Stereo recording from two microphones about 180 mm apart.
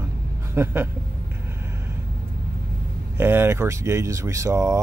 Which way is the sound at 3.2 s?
10° right (ahead or behind).